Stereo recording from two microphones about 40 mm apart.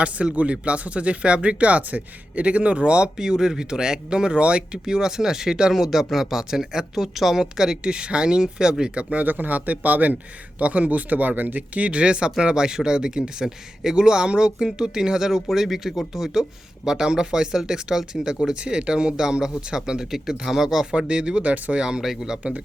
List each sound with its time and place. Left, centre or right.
0.0 s speech: right
3.2 s speech: centre
9.1 s speech: right; by 20.8 s centre
21.1 s speech: right
21.8 s speech: centre